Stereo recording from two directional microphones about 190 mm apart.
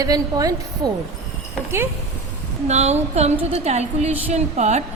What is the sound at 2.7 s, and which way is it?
A woman's voice, 35° right (ahead or behind).